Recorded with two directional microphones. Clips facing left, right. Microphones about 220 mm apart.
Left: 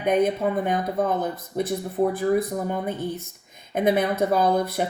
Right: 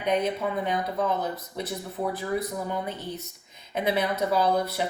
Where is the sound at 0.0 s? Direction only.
50° left (ahead or behind).